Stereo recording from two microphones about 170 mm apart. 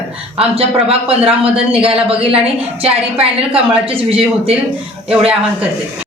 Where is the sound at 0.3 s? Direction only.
35° right (ahead or behind).